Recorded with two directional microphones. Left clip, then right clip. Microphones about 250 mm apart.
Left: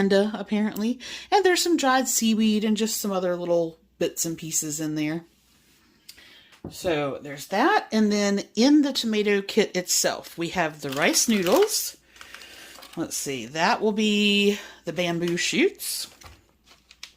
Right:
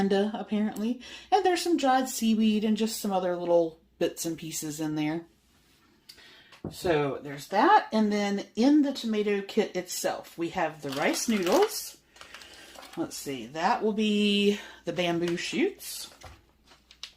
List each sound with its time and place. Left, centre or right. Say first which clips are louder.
0.0 s speech: left 5 dB; left
6.6 s speech: even; left
7.5 s speech: even; left
13.2 s speech: left 4 dB; left
15.4 s speech: left 6 dB; left